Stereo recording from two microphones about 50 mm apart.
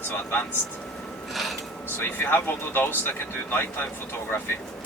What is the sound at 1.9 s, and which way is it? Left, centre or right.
Speech, left.